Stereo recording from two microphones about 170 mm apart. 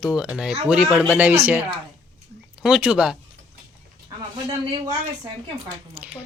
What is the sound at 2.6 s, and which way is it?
Speech, 5° right (ahead or behind).